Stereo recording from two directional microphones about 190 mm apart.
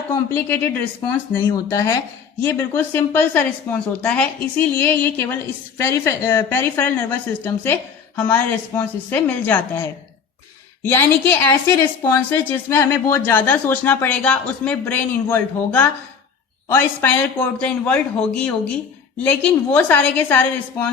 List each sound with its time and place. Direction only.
0.1 s a woman's voice: 10° left (ahead or behind)
10.8 s a woman's voice: 10° left (ahead or behind)